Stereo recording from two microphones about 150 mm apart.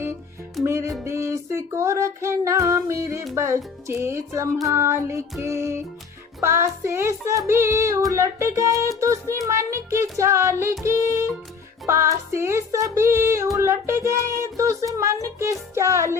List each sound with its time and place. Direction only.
0.6 s music: 20° right (ahead or behind)